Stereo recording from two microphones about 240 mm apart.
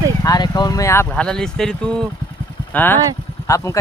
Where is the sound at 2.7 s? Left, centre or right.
Centre.